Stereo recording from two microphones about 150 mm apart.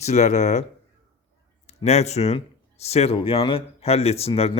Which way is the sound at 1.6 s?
45° left (ahead or behind).